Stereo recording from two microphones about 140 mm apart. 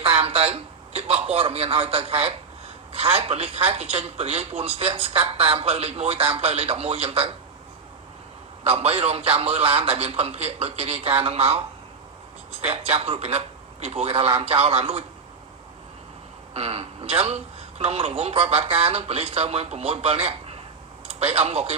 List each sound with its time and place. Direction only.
0.0 s a man's voice: 40° right (ahead or behind)
8.6 s a man's voice: 45° right (ahead or behind)
12.7 s a man's voice: 45° right (ahead or behind)
16.6 s a man's voice: 45° right (ahead or behind)